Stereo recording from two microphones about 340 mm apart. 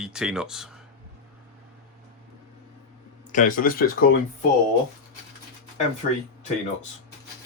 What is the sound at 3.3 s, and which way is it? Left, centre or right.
Speech, left.